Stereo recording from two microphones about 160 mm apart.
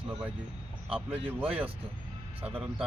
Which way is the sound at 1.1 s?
35° right (ahead or behind).